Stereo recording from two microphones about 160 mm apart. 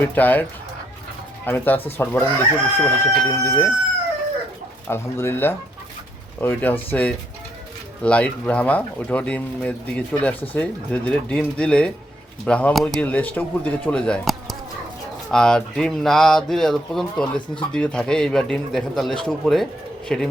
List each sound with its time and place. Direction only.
0.0 s speech: 10° left (ahead or behind)
1.5 s speech: 10° left (ahead or behind)
4.9 s speech: 15° left (ahead or behind)